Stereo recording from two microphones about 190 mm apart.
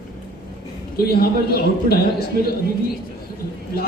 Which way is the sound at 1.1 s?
55° left (ahead or behind).